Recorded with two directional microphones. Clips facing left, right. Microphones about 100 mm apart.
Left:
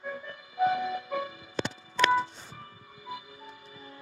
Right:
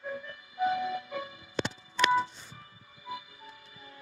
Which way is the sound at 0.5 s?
35° left (ahead or behind).